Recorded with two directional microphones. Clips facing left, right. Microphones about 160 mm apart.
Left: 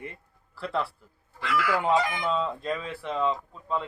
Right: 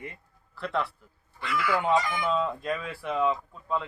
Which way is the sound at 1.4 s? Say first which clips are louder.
Left 2 dB; 90° left.